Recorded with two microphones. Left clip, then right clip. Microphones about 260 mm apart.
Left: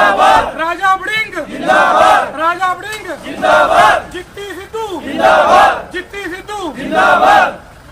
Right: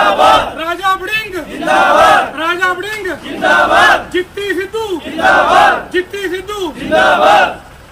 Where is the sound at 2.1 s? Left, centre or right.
Left.